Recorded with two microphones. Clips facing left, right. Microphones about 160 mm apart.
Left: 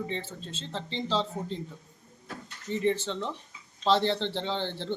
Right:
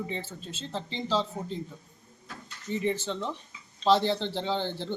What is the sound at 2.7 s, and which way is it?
Speech, 5° right (ahead or behind).